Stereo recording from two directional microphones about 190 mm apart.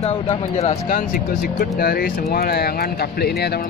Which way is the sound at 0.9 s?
50° left (ahead or behind).